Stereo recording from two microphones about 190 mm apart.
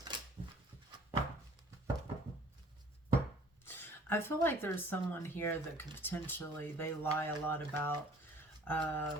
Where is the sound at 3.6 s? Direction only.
10° left (ahead or behind).